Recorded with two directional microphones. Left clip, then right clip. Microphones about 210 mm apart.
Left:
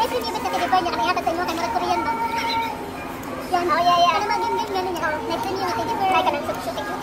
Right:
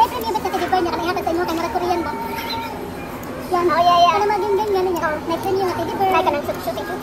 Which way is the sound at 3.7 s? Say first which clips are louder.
Right 4 dB; 25° right (ahead or behind).